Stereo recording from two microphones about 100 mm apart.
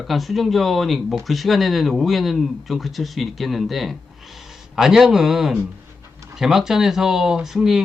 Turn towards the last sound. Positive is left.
turn(degrees=-5)  # may be behind; listen again after turning